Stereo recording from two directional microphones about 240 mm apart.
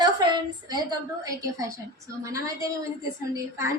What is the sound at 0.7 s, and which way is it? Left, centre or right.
A woman's voice, centre.